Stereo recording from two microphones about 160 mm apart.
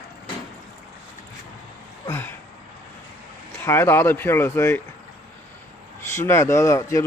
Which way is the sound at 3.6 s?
15° left (ahead or behind).